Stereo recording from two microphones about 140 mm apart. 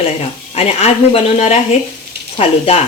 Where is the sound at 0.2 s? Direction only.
45° left (ahead or behind).